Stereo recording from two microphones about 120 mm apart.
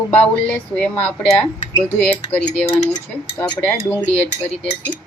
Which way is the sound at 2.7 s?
60° left (ahead or behind).